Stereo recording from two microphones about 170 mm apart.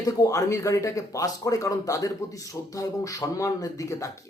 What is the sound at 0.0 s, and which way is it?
Speech, 20° left (ahead or behind).